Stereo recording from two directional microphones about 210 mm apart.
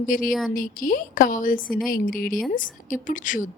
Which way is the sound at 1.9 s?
40° left (ahead or behind).